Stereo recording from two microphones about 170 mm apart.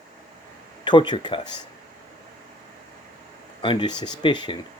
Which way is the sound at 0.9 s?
30° left (ahead or behind).